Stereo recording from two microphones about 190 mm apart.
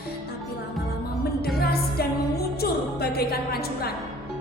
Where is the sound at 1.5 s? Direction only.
55° left (ahead or behind).